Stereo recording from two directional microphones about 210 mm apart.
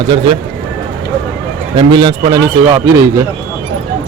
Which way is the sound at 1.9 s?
20° right (ahead or behind).